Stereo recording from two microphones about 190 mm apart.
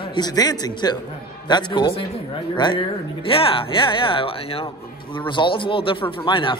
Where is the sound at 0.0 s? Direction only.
25° left (ahead or behind).